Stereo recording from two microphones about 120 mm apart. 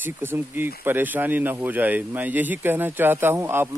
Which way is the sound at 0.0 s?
15° right (ahead or behind).